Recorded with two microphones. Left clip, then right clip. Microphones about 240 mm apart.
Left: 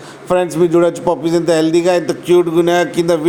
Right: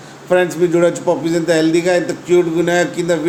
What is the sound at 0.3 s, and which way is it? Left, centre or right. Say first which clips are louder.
A man's voice: even; left.